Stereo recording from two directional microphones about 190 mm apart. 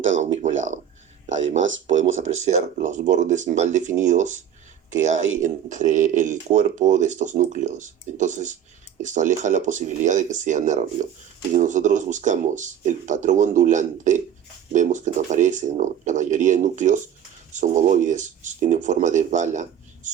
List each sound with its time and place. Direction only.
1.5 s speech: 80° right
2.2 s speech: 40° right (ahead or behind)